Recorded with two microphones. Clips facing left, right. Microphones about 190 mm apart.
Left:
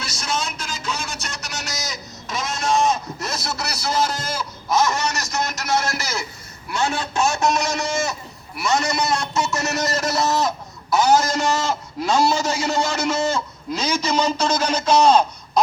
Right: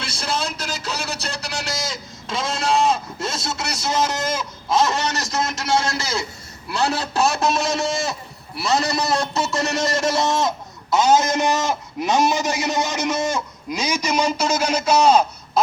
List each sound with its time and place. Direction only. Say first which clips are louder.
0.0 s music: right 1 dB; 30° right (ahead or behind)
5.5 s a man's voice: right 1 dB; 30° right (ahead or behind); by 15.6 s 10° right (ahead or behind)